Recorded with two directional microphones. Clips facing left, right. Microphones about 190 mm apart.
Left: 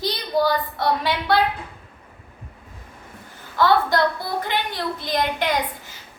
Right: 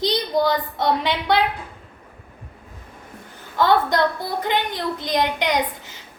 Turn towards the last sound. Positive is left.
turn(degrees=-20)  # may be behind; listen again after turning